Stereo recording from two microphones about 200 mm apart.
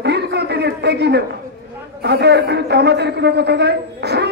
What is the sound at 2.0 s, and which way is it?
A man's voice, 55° right (ahead or behind).